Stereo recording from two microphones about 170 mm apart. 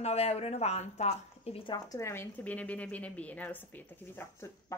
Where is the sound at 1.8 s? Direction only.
20° left (ahead or behind).